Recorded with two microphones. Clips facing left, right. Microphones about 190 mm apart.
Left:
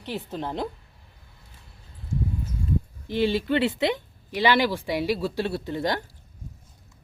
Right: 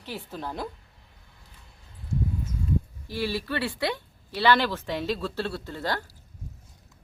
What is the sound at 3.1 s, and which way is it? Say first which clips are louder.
Speech: left 6 dB; 20° left (ahead or behind).